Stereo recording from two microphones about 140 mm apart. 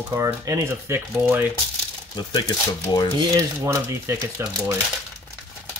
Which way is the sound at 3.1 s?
20° right (ahead or behind).